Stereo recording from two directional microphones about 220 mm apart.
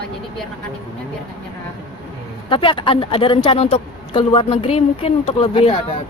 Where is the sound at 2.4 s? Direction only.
25° left (ahead or behind).